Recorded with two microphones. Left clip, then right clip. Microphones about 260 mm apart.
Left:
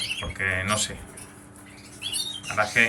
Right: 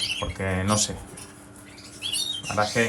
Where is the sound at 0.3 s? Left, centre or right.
Centre.